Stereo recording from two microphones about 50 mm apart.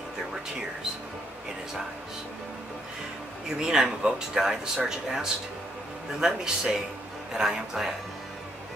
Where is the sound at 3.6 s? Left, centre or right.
Centre.